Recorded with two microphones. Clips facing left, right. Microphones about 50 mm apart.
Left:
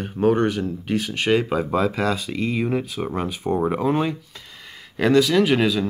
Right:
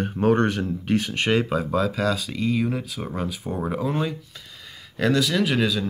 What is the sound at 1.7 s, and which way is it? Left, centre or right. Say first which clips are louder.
Speech: left 1 dB; left.